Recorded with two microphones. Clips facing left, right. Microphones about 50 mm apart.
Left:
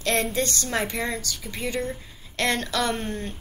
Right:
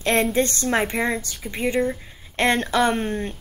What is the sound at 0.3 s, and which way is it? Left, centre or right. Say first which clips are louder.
A woman's voice: right 5 dB; right.